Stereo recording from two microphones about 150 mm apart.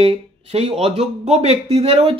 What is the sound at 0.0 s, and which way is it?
Speech, 40° right (ahead or behind).